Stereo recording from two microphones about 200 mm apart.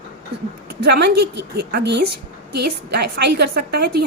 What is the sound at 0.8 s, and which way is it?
A woman's voice, 55° right (ahead or behind).